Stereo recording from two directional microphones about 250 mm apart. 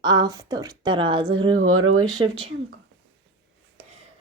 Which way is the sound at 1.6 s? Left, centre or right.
Right.